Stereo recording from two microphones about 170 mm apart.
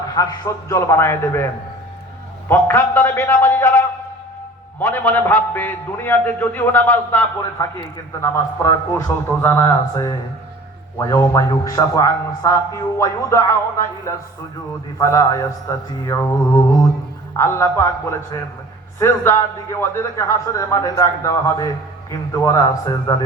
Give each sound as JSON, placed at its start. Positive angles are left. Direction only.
{"t": 0.2, "sound": "a man's voice", "side_deg": 20}
{"t": 2.5, "sound": "a man's voice", "side_deg": 15}